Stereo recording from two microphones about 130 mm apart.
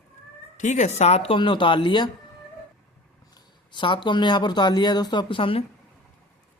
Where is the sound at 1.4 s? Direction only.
40° left (ahead or behind).